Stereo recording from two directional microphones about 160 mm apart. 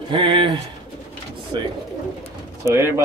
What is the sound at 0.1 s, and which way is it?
Speech, 30° right (ahead or behind).